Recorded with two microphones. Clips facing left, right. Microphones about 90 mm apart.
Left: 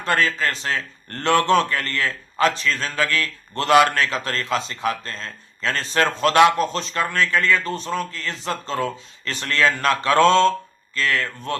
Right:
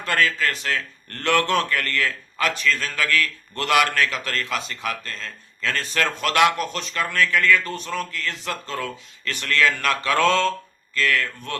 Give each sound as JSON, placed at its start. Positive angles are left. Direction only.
{"t": 0.0, "sound": "a man's voice", "side_deg": 30}